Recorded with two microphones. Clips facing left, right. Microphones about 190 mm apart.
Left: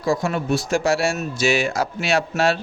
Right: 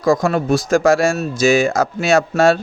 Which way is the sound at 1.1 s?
40° right (ahead or behind).